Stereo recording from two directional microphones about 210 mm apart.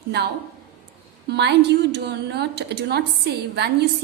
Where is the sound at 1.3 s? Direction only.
55° right (ahead or behind).